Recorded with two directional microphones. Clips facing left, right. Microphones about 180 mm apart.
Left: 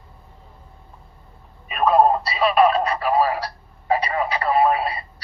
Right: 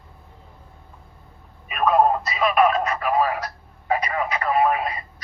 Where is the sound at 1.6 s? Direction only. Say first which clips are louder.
Left 2 dB; 30° left (ahead or behind).